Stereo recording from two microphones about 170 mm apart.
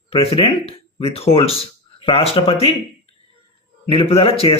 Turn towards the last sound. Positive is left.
turn(degrees=35)  # may be behind; listen again after turning